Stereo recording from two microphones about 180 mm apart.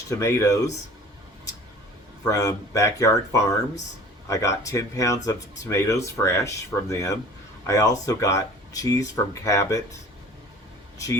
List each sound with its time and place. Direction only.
0.1 s speech: 15° left (ahead or behind)
2.2 s speech: 20° left (ahead or behind)
10.9 s speech: 20° left (ahead or behind)